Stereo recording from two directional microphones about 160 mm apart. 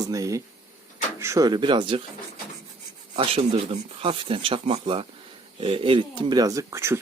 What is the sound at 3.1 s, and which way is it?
Speech, 35° right (ahead or behind).